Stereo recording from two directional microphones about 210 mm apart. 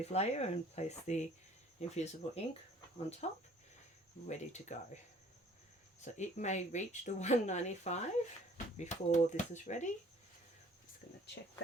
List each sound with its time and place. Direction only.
0.0 s speech: 30° left (ahead or behind)
6.0 s speech: 35° left (ahead or behind)